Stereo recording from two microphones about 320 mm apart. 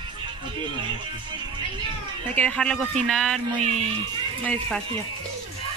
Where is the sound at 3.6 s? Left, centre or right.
Right.